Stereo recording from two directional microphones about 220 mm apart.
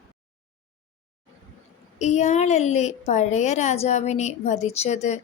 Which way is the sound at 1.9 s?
30° left (ahead or behind).